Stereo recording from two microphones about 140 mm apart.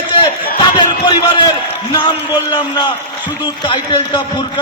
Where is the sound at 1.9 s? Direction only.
30° left (ahead or behind).